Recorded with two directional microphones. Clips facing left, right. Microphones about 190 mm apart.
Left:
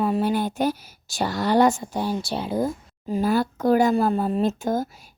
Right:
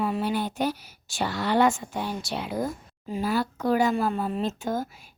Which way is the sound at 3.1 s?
45° left (ahead or behind).